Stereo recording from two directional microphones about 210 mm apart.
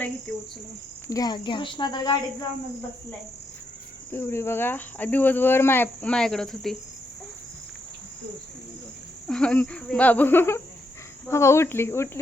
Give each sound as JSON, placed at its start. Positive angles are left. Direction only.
{"t": 0.3, "sound": "cricket", "side_deg": 5}
{"t": 1.0, "sound": "speech", "side_deg": 15}
{"t": 4.1, "sound": "speech", "side_deg": 10}
{"t": 9.2, "sound": "speech", "side_deg": 5}